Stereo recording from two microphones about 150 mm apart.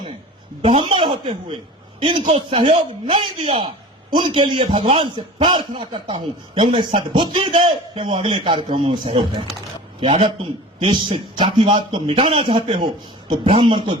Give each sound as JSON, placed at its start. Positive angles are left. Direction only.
{"t": 0.6, "sound": "a man's voice", "side_deg": -40}